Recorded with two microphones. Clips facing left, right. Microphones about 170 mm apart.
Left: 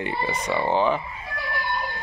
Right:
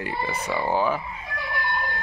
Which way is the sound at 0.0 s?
Centre (ahead or behind).